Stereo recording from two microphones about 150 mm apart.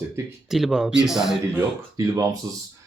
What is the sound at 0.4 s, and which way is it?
Speech, centre (ahead or behind).